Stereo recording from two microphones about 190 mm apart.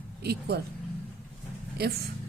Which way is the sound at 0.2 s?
55° right (ahead or behind).